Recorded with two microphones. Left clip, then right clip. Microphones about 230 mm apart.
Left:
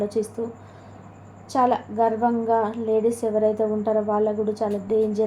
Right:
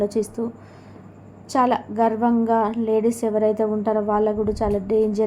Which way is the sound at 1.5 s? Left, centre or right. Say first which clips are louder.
Right 1 dB; right.